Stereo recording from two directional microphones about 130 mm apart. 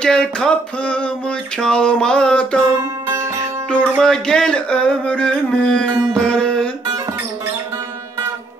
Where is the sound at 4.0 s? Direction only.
5° left (ahead or behind).